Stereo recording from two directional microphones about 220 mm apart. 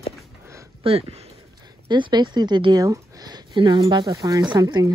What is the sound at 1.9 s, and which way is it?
A woman's voice, 20° right (ahead or behind).